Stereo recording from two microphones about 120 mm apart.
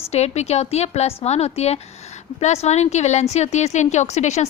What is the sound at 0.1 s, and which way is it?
A woman's voice, 65° left (ahead or behind).